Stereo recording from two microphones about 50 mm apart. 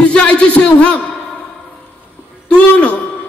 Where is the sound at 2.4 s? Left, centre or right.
Left.